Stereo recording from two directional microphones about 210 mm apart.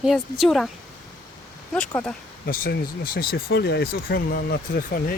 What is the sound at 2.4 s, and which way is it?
Speech, 45° left (ahead or behind).